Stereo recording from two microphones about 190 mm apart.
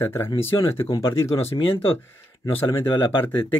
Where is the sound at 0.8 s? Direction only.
25° left (ahead or behind).